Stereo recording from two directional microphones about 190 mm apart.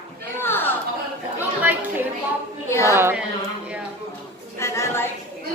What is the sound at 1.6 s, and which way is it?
Chatter, 10° right (ahead or behind).